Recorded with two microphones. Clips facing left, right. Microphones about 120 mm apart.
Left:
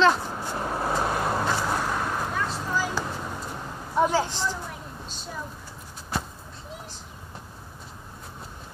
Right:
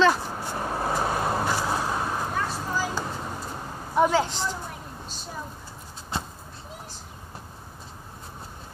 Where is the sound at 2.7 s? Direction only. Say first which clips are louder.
Left 1 dB; 35° right (ahead or behind).